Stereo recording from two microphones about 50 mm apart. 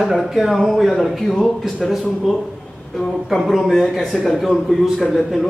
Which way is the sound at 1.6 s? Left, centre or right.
Centre.